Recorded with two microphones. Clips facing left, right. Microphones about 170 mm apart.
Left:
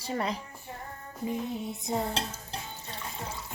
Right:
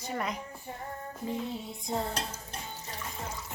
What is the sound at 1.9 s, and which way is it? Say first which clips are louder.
Speech: left 2 dB; 20° left (ahead or behind).